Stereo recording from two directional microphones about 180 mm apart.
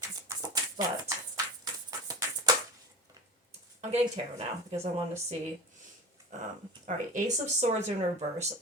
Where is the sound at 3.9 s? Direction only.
35° right (ahead or behind).